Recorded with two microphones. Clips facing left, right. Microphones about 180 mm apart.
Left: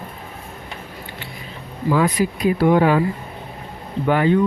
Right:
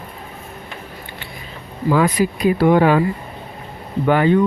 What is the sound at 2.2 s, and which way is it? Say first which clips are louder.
Speech: right 2 dB; 80° right.